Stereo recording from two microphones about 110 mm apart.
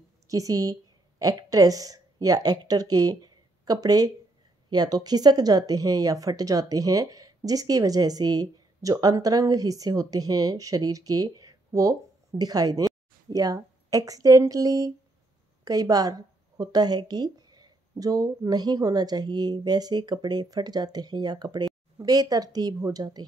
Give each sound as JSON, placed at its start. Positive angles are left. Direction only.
{"t": 0.3, "sound": "speech", "side_deg": -35}